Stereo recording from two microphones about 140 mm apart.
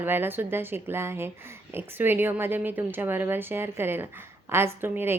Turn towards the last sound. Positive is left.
turn(degrees=-15)  # may be behind; listen again after turning